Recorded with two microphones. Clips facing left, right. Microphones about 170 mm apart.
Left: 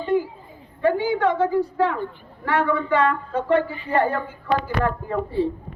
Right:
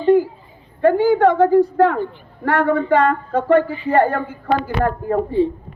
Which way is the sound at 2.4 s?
50° right (ahead or behind).